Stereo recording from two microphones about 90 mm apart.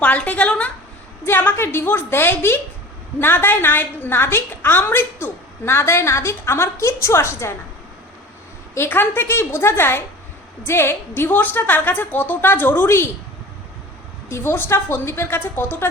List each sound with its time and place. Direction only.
0.0 s a woman's voice: 15° left (ahead or behind); by 7.5 s 30° left (ahead or behind)
8.7 s a woman's voice: 25° left (ahead or behind)
14.3 s a woman's voice: 30° left (ahead or behind)